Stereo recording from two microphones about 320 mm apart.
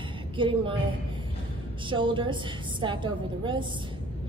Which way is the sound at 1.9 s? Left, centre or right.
Centre.